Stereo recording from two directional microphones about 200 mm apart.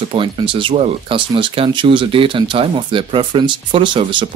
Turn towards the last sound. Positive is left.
turn(degrees=-25)  # may be behind; listen again after turning